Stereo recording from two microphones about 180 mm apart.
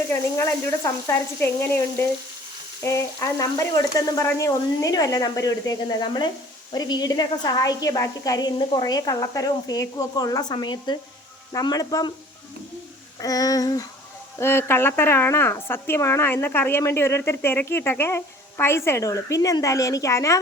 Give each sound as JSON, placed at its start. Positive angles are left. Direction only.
{"t": 0.1, "sound": "a woman's voice", "side_deg": 15}
{"t": 13.1, "sound": "a woman's voice", "side_deg": 20}